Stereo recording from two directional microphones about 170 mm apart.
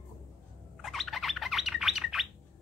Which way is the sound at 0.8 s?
Centre (ahead or behind).